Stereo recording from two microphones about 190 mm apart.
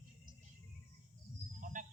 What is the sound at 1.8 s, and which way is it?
Music, 45° right (ahead or behind).